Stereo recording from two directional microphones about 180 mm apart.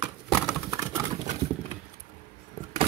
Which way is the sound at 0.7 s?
15° right (ahead or behind).